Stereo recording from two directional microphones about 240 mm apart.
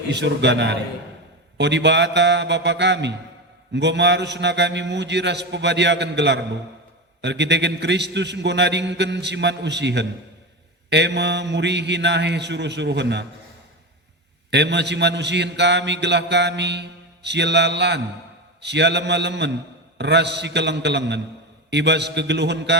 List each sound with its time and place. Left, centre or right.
0.1 s a man's voice: right
14.5 s a man's voice: right